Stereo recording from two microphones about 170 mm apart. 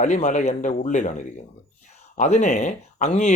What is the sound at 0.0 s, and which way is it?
A man's voice, 45° left (ahead or behind).